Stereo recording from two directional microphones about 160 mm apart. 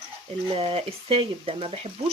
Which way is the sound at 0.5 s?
35° right (ahead or behind).